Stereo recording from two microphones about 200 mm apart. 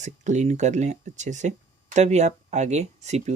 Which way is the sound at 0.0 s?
35° right (ahead or behind).